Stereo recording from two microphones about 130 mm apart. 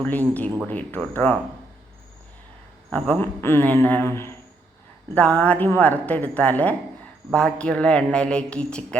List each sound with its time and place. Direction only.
0.0 s a woman's voice: 10° left (ahead or behind)
2.9 s a woman's voice: 15° left (ahead or behind)